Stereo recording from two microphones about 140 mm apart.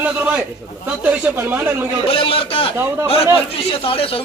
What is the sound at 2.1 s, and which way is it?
Speech, 40° left (ahead or behind).